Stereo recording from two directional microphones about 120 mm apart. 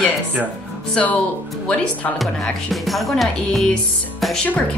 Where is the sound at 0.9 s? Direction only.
10° left (ahead or behind).